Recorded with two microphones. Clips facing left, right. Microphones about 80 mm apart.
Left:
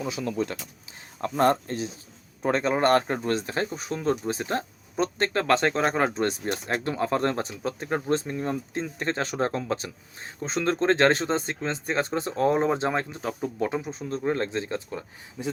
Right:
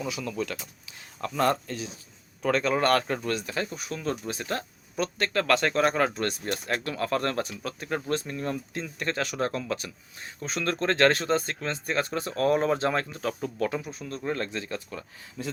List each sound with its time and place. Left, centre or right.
0.1 s speech: left